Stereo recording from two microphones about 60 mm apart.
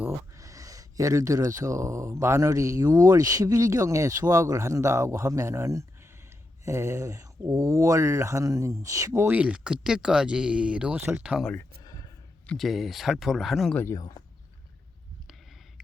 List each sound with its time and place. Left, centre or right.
0.3 s speech: right
9.3 s speech: right
11.8 s a sound: left
12.5 s speech: centre